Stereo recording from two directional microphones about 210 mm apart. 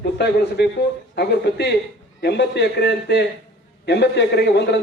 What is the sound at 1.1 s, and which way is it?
Speech, 50° left (ahead or behind).